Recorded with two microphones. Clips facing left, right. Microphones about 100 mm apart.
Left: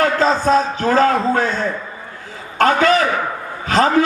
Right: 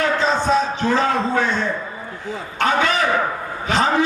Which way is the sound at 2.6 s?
45° left (ahead or behind).